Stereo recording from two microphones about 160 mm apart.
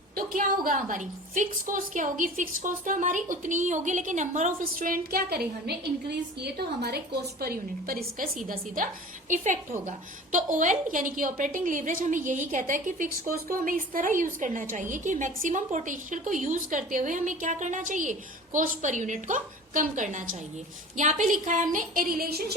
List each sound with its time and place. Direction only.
0.2 s a woman's voice: 65° right (ahead or behind); by 7.0 s 85° right
7.4 s a woman's voice: 70° right (ahead or behind)